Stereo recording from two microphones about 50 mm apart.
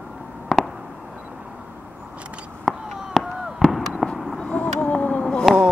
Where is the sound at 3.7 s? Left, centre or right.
Centre.